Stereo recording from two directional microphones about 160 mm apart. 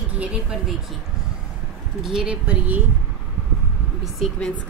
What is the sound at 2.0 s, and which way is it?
Speech, 5° right (ahead or behind).